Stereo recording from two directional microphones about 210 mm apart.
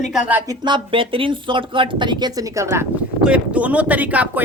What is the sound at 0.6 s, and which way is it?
Speech, 25° right (ahead or behind).